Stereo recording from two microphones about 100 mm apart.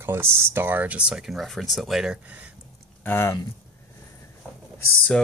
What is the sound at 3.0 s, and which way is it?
Speech, 25° left (ahead or behind).